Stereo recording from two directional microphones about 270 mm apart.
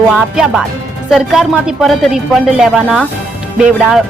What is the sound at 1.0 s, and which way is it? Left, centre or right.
Speech, centre.